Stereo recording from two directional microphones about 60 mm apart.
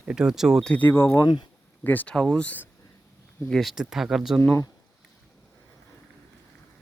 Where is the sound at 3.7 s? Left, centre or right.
Centre.